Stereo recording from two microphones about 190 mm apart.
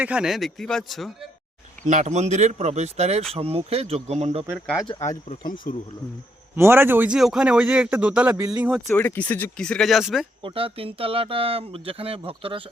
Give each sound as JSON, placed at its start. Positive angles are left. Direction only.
{"t": 0.0, "sound": "speech", "side_deg": -5}
{"t": 1.8, "sound": "speech", "side_deg": -40}
{"t": 4.6, "sound": "speech", "side_deg": 5}
{"t": 4.9, "sound": "speech", "side_deg": 15}
{"t": 5.7, "sound": "speech", "side_deg": 45}
{"t": 6.6, "sound": "speech", "side_deg": -10}
{"t": 8.9, "sound": "speech", "side_deg": 10}
{"t": 10.4, "sound": "speech", "side_deg": -30}